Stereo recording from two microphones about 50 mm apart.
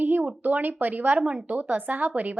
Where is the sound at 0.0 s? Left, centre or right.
Right.